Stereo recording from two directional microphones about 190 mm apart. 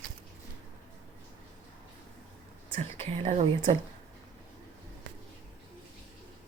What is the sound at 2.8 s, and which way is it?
Speech, 35° right (ahead or behind).